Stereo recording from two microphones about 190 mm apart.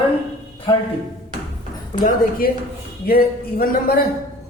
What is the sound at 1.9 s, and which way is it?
Speech, 45° left (ahead or behind).